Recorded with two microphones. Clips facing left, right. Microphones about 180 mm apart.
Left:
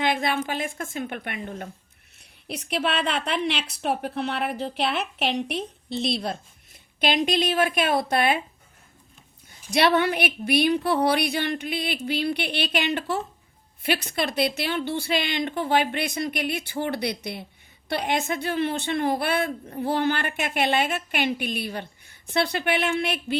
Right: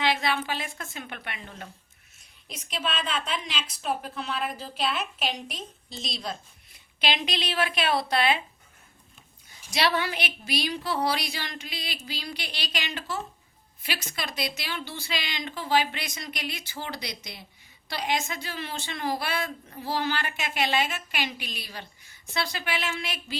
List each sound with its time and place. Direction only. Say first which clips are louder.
0.0 s a woman's voice: left 2 dB; 50° left (ahead or behind)
2.1 s a woman's voice: left 10 dB; 65° left (ahead or behind)
6.7 s a woman's voice: left 6 dB; 50° left (ahead or behind)
9.7 s a woman's voice: left 6 dB; 55° left (ahead or behind)